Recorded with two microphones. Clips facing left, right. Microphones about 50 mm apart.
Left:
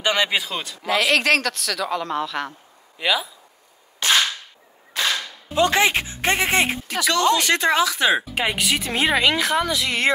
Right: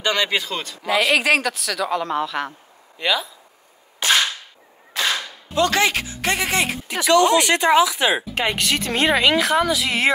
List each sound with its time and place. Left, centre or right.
0.0 s speech: centre
5.0 s cap gun: centre
5.5 s speech: centre
7.1 s speech: centre
8.2 s speech: centre